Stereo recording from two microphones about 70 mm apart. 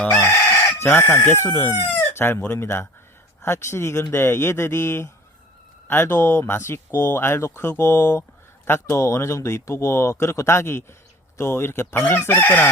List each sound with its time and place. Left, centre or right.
0.1 s chicken: left
2.5 s speech: left
9.0 s speech: left